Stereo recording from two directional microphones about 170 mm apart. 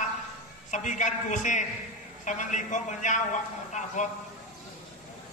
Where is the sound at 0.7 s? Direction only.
45° left (ahead or behind).